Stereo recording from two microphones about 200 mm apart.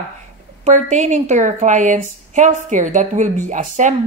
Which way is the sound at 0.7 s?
35° right (ahead or behind).